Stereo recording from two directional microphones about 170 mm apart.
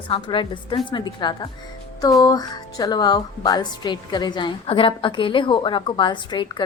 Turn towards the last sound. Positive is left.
turn(degrees=25)  # may be behind; listen again after turning